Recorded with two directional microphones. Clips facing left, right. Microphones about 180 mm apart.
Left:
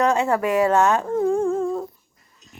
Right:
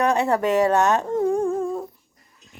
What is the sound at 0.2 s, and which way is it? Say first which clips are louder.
Speech: even; 20° right (ahead or behind).